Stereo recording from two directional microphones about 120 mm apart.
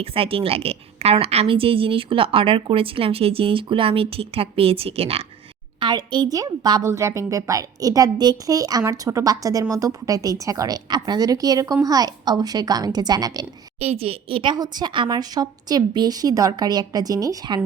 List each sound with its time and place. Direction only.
0.0 s a woman's voice: 50° right (ahead or behind)
5.8 s a woman's voice: 40° right (ahead or behind)
13.7 s a woman's voice: 55° right (ahead or behind); by 17.6 s 30° right (ahead or behind)